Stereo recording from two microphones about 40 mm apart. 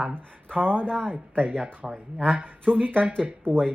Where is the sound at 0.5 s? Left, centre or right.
Right.